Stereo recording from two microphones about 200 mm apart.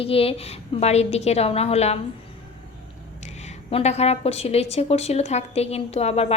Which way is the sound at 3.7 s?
30° left (ahead or behind).